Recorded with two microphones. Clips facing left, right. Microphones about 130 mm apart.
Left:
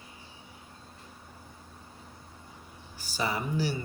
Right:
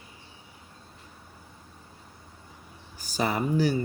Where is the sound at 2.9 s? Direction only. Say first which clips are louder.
Right 4 dB; 45° right (ahead or behind).